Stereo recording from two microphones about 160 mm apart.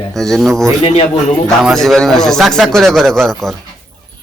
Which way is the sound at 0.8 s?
35° left (ahead or behind).